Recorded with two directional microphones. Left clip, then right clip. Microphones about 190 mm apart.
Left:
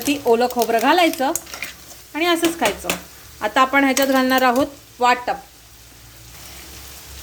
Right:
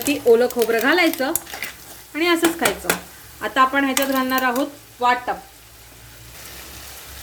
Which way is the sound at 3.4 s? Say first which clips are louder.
Left 2 dB; 25° left (ahead or behind).